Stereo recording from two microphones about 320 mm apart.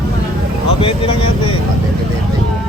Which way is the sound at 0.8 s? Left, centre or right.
Centre.